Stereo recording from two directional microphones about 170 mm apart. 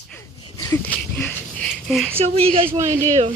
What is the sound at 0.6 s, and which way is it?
Speech, 15° left (ahead or behind).